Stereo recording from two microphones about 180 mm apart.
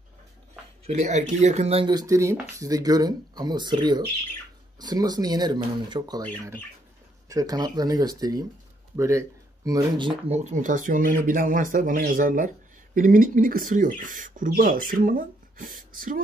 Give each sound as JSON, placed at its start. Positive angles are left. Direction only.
{"t": 0.8, "sound": "speech", "side_deg": -40}